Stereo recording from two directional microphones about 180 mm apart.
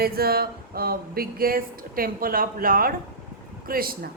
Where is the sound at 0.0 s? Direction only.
60° right (ahead or behind).